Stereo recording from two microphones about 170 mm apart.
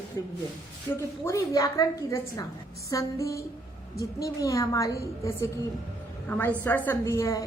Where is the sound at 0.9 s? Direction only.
15° left (ahead or behind).